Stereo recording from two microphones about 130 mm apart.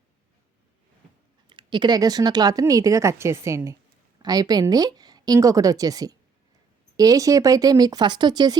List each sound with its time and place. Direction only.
1.5 s a woman's voice: 40° right (ahead or behind)